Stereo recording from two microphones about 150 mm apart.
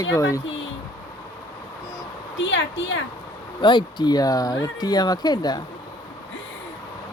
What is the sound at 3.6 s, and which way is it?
Speech, 30° left (ahead or behind).